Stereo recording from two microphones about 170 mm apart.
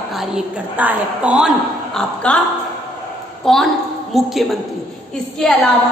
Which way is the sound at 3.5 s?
Centre (ahead or behind).